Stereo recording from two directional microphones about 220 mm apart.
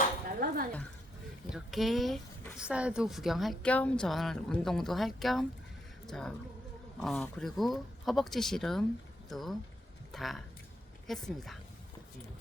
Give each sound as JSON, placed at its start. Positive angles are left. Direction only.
{"t": 0.3, "sound": "dishes", "side_deg": -40}
{"t": 1.5, "sound": "speech", "side_deg": 0}